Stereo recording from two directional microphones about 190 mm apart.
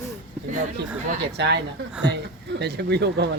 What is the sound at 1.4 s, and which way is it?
Speech, 60° right (ahead or behind).